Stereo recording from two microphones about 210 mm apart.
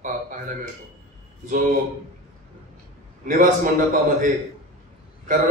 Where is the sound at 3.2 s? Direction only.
40° right (ahead or behind).